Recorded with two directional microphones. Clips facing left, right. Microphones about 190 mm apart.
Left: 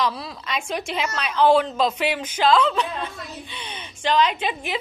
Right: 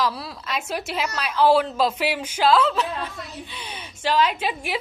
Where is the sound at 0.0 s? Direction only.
5° right (ahead or behind).